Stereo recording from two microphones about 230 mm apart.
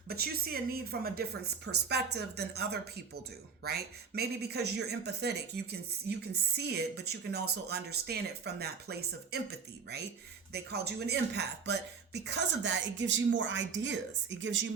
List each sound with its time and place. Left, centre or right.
0.1 s speech: right
6.6 s speech: right